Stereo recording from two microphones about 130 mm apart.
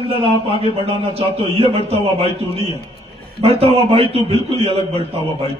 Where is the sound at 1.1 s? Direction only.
50° right (ahead or behind).